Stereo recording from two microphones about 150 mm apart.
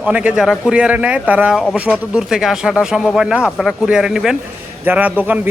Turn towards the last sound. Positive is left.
turn(degrees=-10)  # may be behind; listen again after turning